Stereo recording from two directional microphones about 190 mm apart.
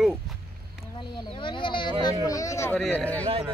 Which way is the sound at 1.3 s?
25° left (ahead or behind).